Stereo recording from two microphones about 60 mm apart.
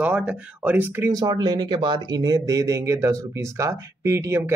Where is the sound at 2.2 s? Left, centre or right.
Right.